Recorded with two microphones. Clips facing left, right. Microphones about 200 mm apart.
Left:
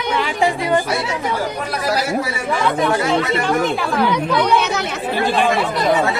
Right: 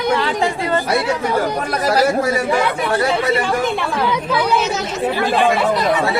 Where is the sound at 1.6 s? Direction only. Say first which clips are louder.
Right 4 dB; 45° right (ahead or behind).